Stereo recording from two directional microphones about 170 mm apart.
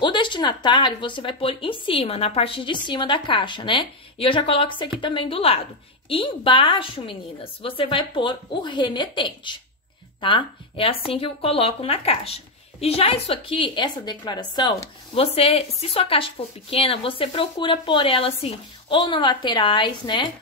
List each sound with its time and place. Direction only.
0.0 s speech: 30° left (ahead or behind)
15.1 s speech: 35° left (ahead or behind)